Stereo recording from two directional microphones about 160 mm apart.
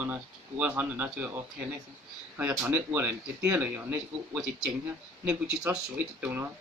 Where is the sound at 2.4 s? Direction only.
10° right (ahead or behind).